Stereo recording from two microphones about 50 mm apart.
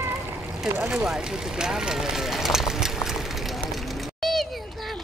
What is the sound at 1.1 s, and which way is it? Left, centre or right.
Speech, centre.